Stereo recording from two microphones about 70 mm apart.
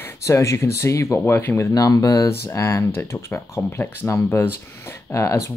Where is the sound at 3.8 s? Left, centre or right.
Left.